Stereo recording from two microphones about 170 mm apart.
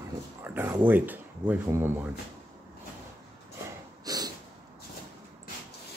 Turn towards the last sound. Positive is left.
turn(degrees=-20)  # may be behind; listen again after turning